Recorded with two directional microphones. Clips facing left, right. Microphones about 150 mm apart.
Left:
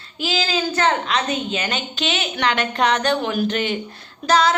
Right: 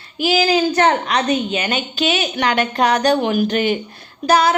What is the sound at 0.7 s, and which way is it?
A woman's voice, 35° right (ahead or behind).